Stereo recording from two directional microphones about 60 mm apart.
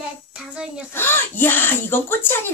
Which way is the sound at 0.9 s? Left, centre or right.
Left.